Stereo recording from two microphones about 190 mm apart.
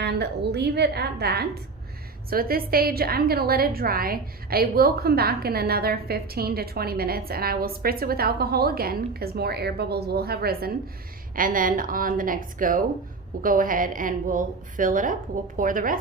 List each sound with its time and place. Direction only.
0.0 s a woman's voice: 60° right (ahead or behind)